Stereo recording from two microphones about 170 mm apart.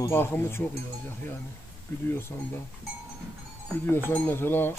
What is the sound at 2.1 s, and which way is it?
Cowbell, 15° left (ahead or behind).